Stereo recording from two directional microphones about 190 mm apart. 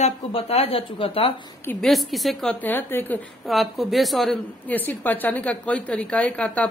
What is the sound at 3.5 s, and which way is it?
A woman's voice, centre (ahead or behind).